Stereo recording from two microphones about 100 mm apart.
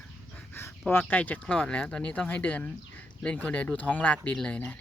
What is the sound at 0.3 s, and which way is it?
Speech, 20° left (ahead or behind).